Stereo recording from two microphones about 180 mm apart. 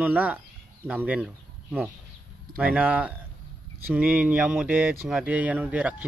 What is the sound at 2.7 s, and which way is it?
Speech, 10° right (ahead or behind).